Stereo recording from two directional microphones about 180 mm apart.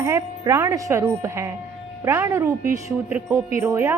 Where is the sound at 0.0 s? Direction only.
15° right (ahead or behind).